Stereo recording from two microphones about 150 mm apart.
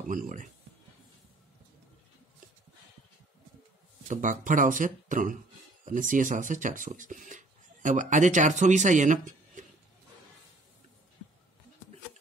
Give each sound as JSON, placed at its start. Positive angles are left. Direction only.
{"t": 0.1, "sound": "speech", "side_deg": -60}
{"t": 4.1, "sound": "speech", "side_deg": -60}